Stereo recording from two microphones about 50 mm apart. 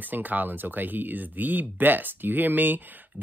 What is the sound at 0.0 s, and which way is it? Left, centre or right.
Speech, right.